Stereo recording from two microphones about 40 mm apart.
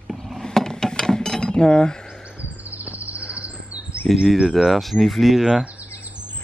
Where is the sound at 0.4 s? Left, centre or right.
Centre.